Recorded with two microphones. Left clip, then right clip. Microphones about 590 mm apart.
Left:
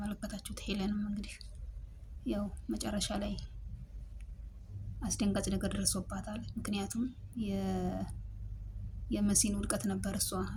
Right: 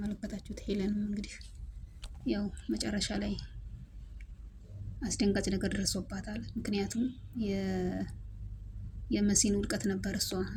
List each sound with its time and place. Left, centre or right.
0.1 s a woman's voice: left
2.2 s a woman's voice: left
4.9 s a woman's voice: left
9.0 s a woman's voice: left